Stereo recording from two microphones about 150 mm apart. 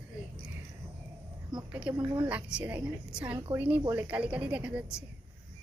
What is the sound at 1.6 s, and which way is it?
A woman's voice, 10° right (ahead or behind).